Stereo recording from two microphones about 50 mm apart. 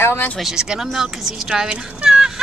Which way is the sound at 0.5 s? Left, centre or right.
Centre.